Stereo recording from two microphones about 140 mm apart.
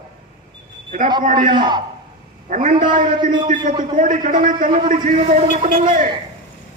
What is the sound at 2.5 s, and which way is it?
A man's voice, 65° right (ahead or behind).